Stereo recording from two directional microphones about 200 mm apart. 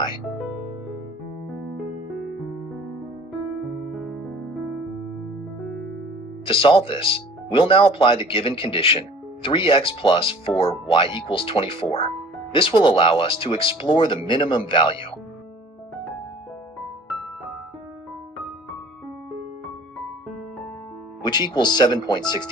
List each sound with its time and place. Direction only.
3.8 s music: centre (ahead or behind)
6.4 s speech: 25° left (ahead or behind)
21.2 s speech: 20° left (ahead or behind)